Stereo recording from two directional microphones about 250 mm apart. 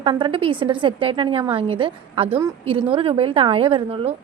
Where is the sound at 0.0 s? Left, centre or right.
Centre.